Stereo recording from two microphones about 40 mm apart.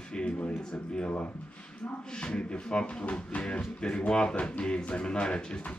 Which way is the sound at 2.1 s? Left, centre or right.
Left.